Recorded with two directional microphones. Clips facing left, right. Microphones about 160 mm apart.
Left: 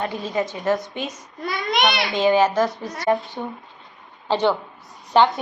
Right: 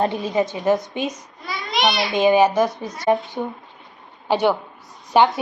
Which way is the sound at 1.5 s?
50° left (ahead or behind).